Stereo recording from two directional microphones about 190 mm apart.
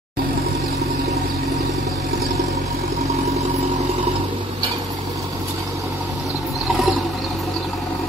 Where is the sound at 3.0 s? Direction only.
35° right (ahead or behind).